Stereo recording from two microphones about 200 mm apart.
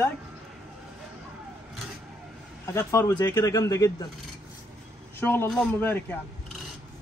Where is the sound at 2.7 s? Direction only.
15° left (ahead or behind).